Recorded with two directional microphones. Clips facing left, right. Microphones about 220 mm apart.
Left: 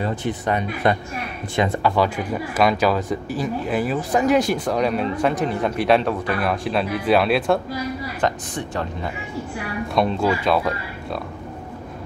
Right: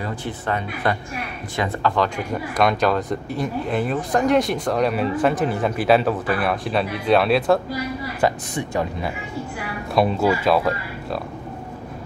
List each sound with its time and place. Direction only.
0.0 s speech: 20° left (ahead or behind); by 7.6 s centre (ahead or behind)
8.2 s speech: 10° right (ahead or behind)